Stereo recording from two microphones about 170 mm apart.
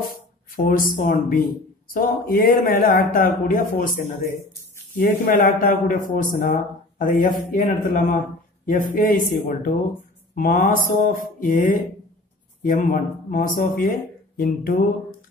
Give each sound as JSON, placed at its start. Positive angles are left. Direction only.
{"t": 0.6, "sound": "speech", "side_deg": 55}